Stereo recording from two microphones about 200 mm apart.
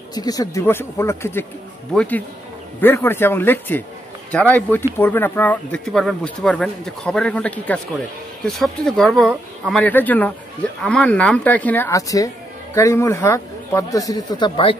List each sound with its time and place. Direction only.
0.1 s speech: 20° left (ahead or behind)